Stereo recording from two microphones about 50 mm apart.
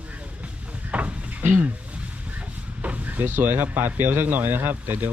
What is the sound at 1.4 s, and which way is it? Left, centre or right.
Speech, right.